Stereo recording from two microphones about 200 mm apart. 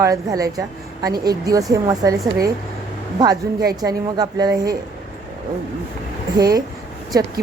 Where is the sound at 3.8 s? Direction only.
20° right (ahead or behind).